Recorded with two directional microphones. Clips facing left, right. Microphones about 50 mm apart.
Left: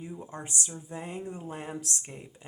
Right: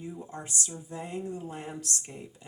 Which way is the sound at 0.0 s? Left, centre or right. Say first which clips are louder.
Even; centre.